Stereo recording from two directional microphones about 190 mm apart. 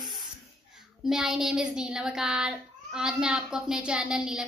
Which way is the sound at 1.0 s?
Centre (ahead or behind).